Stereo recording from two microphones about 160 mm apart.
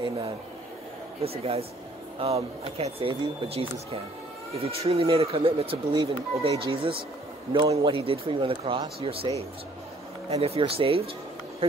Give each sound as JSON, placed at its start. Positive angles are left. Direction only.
{"t": 1.2, "sound": "speech", "side_deg": -40}
{"t": 10.3, "sound": "speech", "side_deg": -40}